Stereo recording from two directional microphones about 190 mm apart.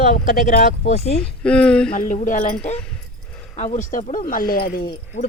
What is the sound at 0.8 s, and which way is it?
Speech, 35° left (ahead or behind).